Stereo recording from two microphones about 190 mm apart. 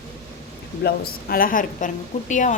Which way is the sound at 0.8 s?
55° left (ahead or behind).